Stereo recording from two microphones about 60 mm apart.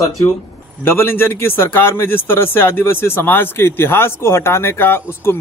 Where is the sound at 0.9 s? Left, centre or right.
Left.